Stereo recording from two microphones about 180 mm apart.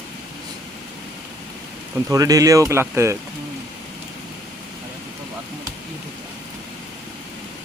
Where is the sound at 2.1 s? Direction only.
20° right (ahead or behind).